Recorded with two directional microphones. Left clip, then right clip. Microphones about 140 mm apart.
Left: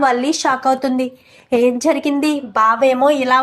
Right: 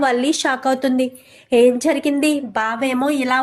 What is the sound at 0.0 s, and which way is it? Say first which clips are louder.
A woman's voice: left 2 dB; 20° right (ahead or behind).